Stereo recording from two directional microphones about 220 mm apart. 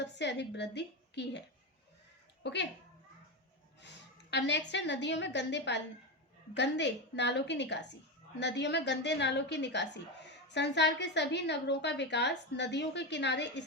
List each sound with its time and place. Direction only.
0.0 s a woman's voice: 50° left (ahead or behind)
2.4 s a child's voice: 50° left (ahead or behind)
4.3 s a woman's voice: 50° left (ahead or behind)